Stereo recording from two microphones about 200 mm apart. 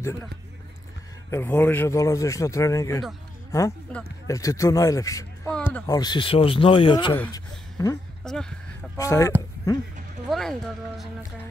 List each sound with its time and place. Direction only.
1.3 s speech: 10° left (ahead or behind)
5.9 s speech: 20° left (ahead or behind)
8.2 s speech: 5° left (ahead or behind)
8.9 s speech: 15° left (ahead or behind)
10.3 s speech: centre (ahead or behind)